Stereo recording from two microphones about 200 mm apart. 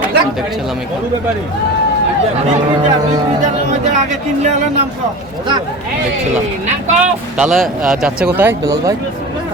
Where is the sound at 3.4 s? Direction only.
35° right (ahead or behind).